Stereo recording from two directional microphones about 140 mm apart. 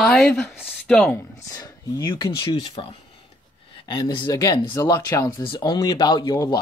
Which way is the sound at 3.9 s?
30° left (ahead or behind).